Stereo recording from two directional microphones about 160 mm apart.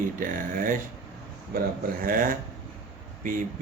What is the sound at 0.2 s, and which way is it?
Speech, 60° right (ahead or behind).